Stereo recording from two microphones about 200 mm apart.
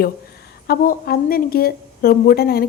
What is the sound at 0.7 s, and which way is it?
A woman's voice, 50° left (ahead or behind).